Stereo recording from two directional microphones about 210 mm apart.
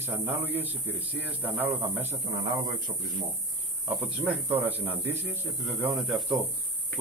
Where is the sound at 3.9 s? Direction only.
5° right (ahead or behind).